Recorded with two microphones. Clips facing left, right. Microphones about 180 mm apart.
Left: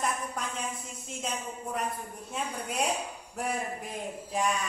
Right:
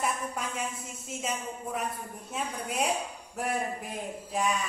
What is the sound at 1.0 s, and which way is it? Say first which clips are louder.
A man's voice: right 2 dB; 5° right (ahead or behind).